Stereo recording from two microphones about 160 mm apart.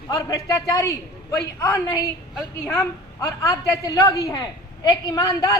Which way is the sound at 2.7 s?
15° left (ahead or behind).